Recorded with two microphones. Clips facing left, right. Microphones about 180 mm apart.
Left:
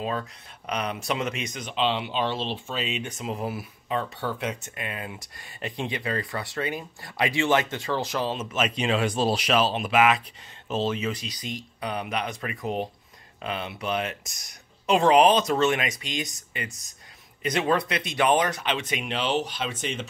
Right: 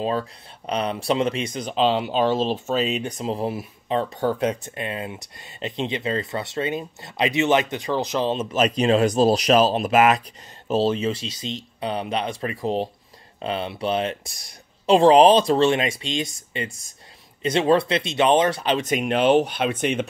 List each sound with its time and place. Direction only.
0.7 s speech: 30° right (ahead or behind)
8.5 s speech: 35° right (ahead or behind); by 20.1 s 60° right (ahead or behind)